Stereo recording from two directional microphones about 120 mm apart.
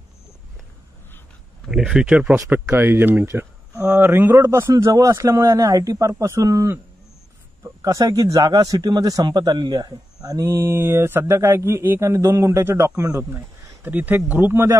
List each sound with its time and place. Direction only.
1.7 s speech: 5° right (ahead or behind); by 10.5 s 30° right (ahead or behind)
10.5 s speech: 20° right (ahead or behind)
13.8 s speech: 15° right (ahead or behind)